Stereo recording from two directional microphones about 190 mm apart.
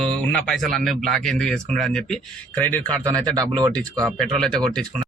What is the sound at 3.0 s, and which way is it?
Speech, 20° right (ahead or behind).